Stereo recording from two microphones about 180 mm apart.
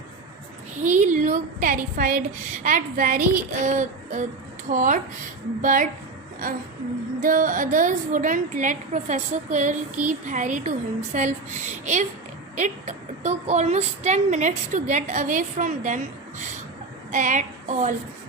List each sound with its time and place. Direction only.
0.8 s a woman's voice: 40° right (ahead or behind)
7.2 s a woman's voice: 50° right (ahead or behind)
17.1 s a woman's voice: 45° right (ahead or behind)